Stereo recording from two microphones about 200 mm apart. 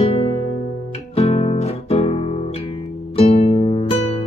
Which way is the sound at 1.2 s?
30° left (ahead or behind).